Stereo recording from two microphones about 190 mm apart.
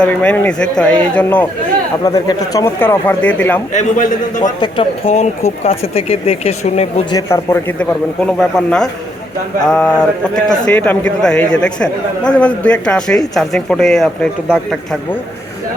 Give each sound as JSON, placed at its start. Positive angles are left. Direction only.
{"t": 0.0, "sound": "a man's voice", "side_deg": 5}
{"t": 2.0, "sound": "a man's voice", "side_deg": 20}
{"t": 3.7, "sound": "a man's voice", "side_deg": 40}
{"t": 4.6, "sound": "speech", "side_deg": 30}
{"t": 7.1, "sound": "a man's voice", "side_deg": 20}